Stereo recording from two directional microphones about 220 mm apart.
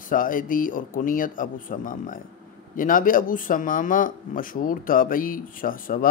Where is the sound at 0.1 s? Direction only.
40° left (ahead or behind).